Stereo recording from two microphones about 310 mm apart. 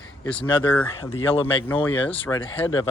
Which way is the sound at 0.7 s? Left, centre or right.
Centre.